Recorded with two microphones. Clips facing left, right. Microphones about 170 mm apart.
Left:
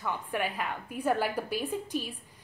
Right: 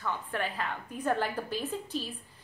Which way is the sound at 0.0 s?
15° left (ahead or behind).